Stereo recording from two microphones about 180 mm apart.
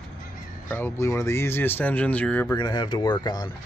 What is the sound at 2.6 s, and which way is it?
Speech, 25° left (ahead or behind).